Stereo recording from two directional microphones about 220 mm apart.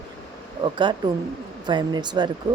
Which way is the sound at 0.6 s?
20° right (ahead or behind).